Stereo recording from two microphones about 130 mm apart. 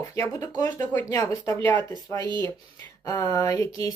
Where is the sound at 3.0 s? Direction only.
25° left (ahead or behind).